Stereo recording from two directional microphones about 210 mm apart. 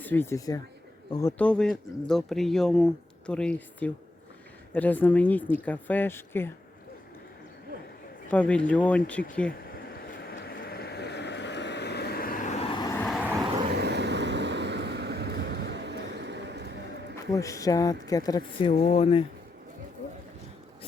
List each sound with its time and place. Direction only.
0.0 s speech: 10° left (ahead or behind)
8.3 s speech: 5° left (ahead or behind)
10.1 s vehicle: 50° left (ahead or behind); by 13.0 s 20° left (ahead or behind)
13.0 s vehicle: 5° left (ahead or behind)
13.7 s vehicle: 55° right (ahead or behind)
17.2 s speech: 15° left (ahead or behind)